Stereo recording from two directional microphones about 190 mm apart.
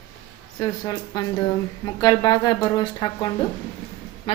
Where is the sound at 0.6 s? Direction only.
20° left (ahead or behind).